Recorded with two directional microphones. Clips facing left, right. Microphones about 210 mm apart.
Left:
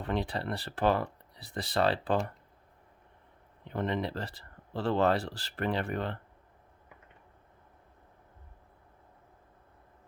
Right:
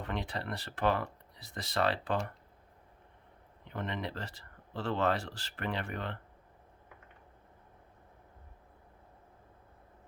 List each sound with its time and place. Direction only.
0.0 s speech: 35° left (ahead or behind)
3.7 s speech: 35° left (ahead or behind)